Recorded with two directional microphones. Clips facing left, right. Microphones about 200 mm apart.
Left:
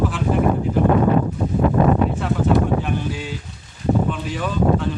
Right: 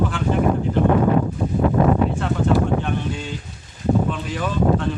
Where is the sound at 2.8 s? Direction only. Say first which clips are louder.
Even; 5° left (ahead or behind).